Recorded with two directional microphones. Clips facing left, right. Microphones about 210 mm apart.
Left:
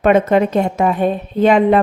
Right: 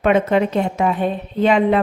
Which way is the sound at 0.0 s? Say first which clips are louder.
Left 3 dB; 45° left (ahead or behind).